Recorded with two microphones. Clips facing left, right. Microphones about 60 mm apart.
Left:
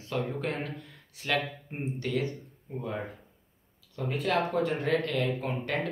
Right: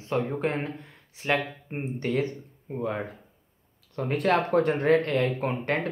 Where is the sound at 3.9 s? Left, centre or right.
Right.